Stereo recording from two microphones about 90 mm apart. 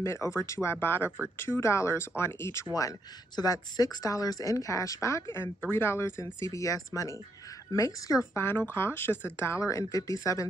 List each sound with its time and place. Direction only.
0.0 s speech: 30° left (ahead or behind)
3.3 s speech: 45° left (ahead or behind)
8.4 s speech: 25° left (ahead or behind)